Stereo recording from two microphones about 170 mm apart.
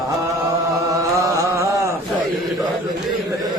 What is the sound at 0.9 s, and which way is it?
Carnatic music, 20° right (ahead or behind).